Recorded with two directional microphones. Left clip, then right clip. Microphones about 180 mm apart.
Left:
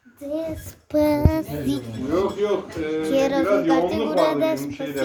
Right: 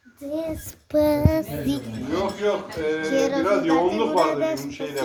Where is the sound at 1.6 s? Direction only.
15° right (ahead or behind).